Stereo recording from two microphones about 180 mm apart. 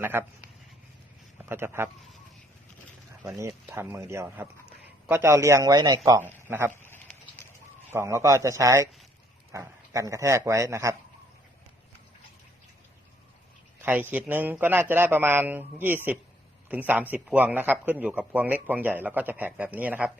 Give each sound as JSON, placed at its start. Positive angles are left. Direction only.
{"t": 0.0, "sound": "speech", "side_deg": -10}
{"t": 3.2, "sound": "speech", "side_deg": -15}
{"t": 6.1, "sound": "speech", "side_deg": -10}
{"t": 7.9, "sound": "speech", "side_deg": -15}
{"t": 13.8, "sound": "speech", "side_deg": -10}